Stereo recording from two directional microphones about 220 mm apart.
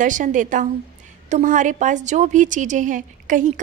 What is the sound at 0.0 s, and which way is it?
A woman's voice, 35° right (ahead or behind).